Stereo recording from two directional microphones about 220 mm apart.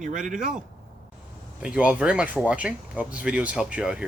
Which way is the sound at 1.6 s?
5° right (ahead or behind).